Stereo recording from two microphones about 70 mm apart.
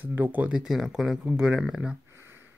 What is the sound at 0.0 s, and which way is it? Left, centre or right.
Speech, right.